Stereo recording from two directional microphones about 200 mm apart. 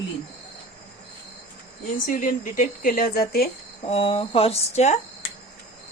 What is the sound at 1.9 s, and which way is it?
Speech, 40° left (ahead or behind).